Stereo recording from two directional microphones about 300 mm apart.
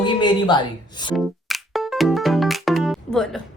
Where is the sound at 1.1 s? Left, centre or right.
Centre.